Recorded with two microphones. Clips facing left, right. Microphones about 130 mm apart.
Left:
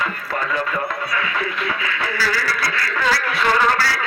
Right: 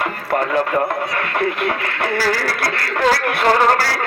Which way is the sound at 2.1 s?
50° right (ahead or behind).